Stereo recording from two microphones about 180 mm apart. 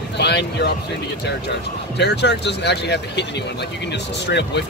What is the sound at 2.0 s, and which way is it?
Speech, 70° left (ahead or behind).